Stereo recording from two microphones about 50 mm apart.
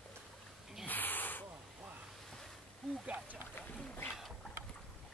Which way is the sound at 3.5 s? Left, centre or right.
Left.